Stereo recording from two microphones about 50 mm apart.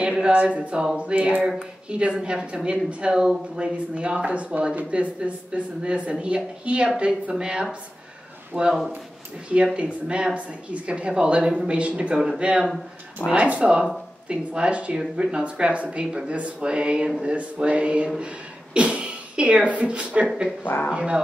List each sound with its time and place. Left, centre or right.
0.2 s speech: right
8.5 s speech: right
9.8 s a woman's voice: right
20.6 s speech: left
20.9 s speech: right